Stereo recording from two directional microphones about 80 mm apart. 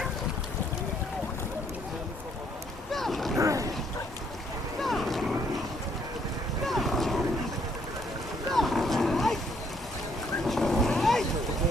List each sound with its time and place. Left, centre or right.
2.9 s a sound: centre
3.3 s a sound: right
4.8 s boat: centre
6.7 s boat: centre
8.5 s boat: centre
10.4 s boat: centre